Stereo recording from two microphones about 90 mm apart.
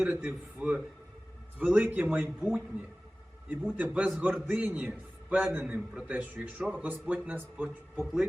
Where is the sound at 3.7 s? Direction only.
15° right (ahead or behind).